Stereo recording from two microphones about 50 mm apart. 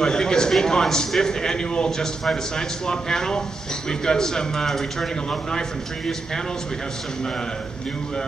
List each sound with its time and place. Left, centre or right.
0.0 s a man's voice: centre